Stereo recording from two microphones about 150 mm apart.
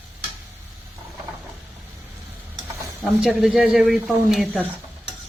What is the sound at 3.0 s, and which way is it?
Speech, centre (ahead or behind).